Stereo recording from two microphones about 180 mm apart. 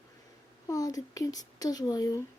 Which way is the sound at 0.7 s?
20° left (ahead or behind).